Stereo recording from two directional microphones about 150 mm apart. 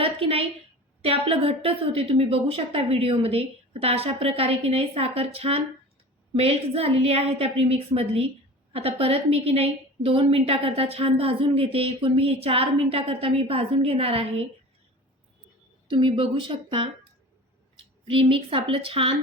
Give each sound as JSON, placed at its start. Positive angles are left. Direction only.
{"t": 0.0, "sound": "a sound", "side_deg": -40}
{"t": 1.0, "sound": "a woman's voice", "side_deg": -40}
{"t": 15.9, "sound": "a woman's voice", "side_deg": -35}
{"t": 18.1, "sound": "a woman's voice", "side_deg": -35}